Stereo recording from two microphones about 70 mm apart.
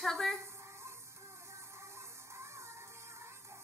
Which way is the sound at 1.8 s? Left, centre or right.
Right.